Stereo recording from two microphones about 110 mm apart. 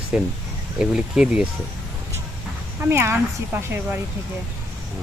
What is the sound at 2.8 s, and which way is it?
Speech, 20° right (ahead or behind).